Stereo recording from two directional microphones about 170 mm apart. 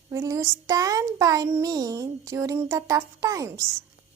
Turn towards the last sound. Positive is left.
turn(degrees=-20)  # may be behind; listen again after turning